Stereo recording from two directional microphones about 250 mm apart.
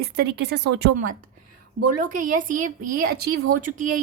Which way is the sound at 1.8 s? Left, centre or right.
Right.